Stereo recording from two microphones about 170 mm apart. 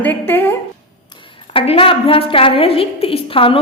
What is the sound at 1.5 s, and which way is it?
A woman's voice, 30° left (ahead or behind).